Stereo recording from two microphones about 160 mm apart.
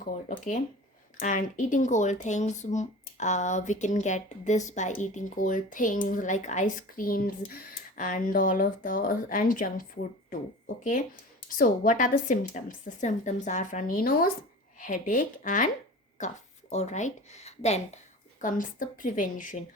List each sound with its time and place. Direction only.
0.0 s speech: 50° left (ahead or behind)
11.4 s a woman's voice: 60° left (ahead or behind); by 18.0 s 45° left (ahead or behind)
18.4 s speech: 55° left (ahead or behind)